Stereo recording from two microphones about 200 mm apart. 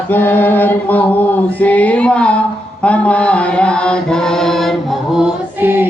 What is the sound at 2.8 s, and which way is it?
Chant, 5° left (ahead or behind).